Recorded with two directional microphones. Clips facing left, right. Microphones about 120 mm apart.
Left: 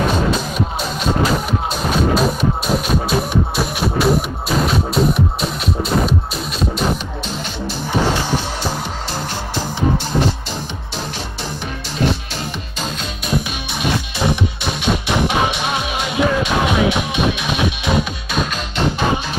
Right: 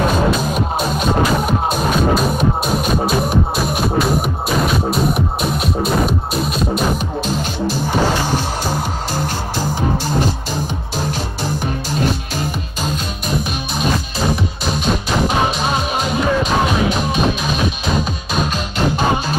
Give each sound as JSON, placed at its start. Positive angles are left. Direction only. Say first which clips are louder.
{"t": 0.6, "sound": "music", "louder": "right 3 dB", "side_deg": -50}
{"t": 5.1, "sound": "music", "louder": "right 1 dB", "side_deg": -50}
{"t": 14.8, "sound": "music", "louder": "even", "side_deg": -40}